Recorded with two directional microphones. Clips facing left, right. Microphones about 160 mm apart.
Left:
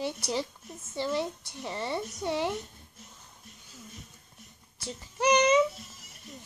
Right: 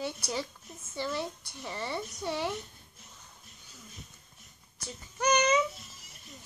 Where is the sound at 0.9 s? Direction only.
20° left (ahead or behind).